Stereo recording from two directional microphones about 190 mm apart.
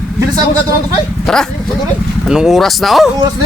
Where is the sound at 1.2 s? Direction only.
5° left (ahead or behind).